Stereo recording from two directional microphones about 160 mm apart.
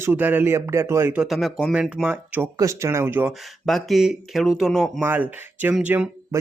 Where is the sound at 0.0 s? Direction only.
10° right (ahead or behind).